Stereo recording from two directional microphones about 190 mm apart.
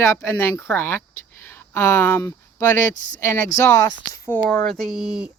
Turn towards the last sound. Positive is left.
turn(degrees=0)  # may be behind; listen again after turning